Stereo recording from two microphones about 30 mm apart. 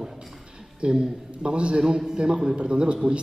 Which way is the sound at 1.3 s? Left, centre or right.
Right.